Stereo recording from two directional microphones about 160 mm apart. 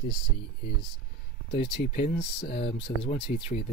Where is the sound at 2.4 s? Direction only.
35° left (ahead or behind).